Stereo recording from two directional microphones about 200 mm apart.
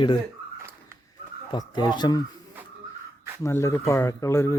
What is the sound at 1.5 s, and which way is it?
Speech, 20° left (ahead or behind).